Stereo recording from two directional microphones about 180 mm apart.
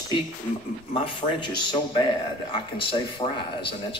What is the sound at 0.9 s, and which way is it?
Speech, 30° left (ahead or behind).